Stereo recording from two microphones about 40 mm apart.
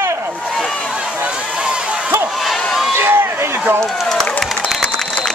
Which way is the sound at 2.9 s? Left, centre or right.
Right.